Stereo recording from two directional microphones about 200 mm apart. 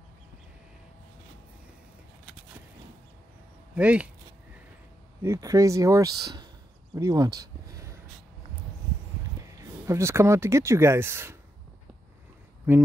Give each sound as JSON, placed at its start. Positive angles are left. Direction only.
{"t": 3.7, "sound": "speech", "side_deg": -5}
{"t": 5.2, "sound": "speech", "side_deg": -15}
{"t": 9.6, "sound": "speech", "side_deg": -15}